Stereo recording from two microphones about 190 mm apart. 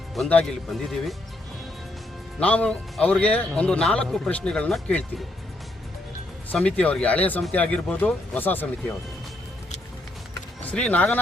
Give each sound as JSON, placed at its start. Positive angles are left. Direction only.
{"t": 0.1, "sound": "speech", "side_deg": 5}
{"t": 2.4, "sound": "speech", "side_deg": 5}
{"t": 6.5, "sound": "speech", "side_deg": 5}
{"t": 10.7, "sound": "speech", "side_deg": 5}